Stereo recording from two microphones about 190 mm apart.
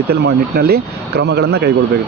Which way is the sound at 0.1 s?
55° right (ahead or behind).